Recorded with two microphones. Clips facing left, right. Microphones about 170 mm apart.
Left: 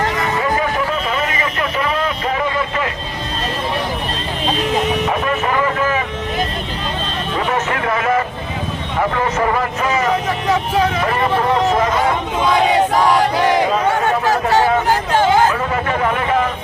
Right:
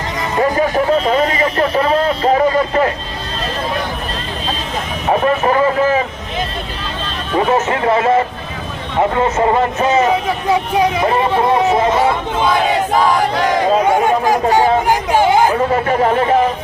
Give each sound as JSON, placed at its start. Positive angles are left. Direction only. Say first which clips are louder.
{"t": 0.9, "sound": "vehicle", "louder": "right 6 dB", "side_deg": -35}
{"t": 5.0, "sound": "vehicle", "louder": "right 5 dB", "side_deg": -35}
{"t": 7.3, "sound": "a sound", "louder": "right 6 dB", "side_deg": -25}
{"t": 9.0, "sound": "speech", "louder": "right 4 dB", "side_deg": -25}
{"t": 10.1, "sound": "speech", "louder": "right 2 dB", "side_deg": -15}
{"t": 13.8, "sound": "chatter", "louder": "right 3 dB", "side_deg": -15}
{"t": 15.5, "sound": "a sound", "louder": "right 5 dB", "side_deg": -35}